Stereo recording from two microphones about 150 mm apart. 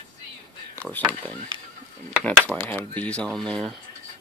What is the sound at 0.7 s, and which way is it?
Speech, 10° left (ahead or behind).